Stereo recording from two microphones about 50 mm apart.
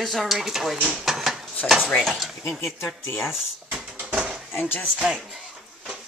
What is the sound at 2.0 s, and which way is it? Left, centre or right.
Speech, centre.